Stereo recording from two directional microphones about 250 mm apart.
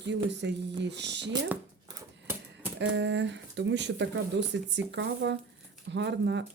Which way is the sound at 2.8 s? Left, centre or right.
Right.